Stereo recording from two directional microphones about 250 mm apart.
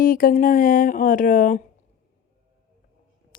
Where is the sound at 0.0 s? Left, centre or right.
Left.